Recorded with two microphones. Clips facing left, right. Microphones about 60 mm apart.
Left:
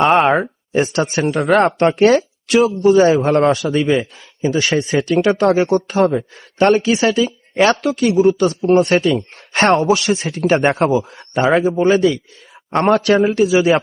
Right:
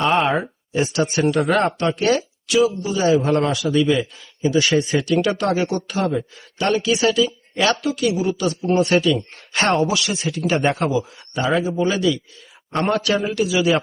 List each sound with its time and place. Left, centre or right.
0.0 s speech: left
0.9 s a man's voice: left
1.5 s speech: left
4.2 s a man's voice: left
6.8 s a man's voice: left
7.2 s a man's voice: left
9.3 s a sound: left
9.8 s a man's voice: left
13.3 s a man's voice: left